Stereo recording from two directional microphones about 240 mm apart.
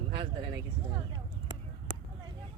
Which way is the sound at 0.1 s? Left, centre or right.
Right.